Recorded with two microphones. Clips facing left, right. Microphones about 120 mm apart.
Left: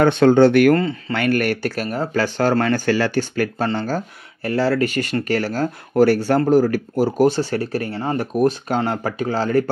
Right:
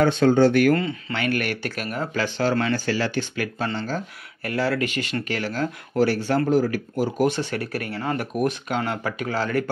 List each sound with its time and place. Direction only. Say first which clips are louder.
0.0 s speech: left 4 dB; 65° left (ahead or behind)
0.7 s speech: left 5 dB; 40° left (ahead or behind)